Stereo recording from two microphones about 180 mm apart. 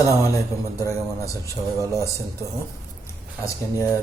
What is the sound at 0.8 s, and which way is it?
Speech, 20° left (ahead or behind).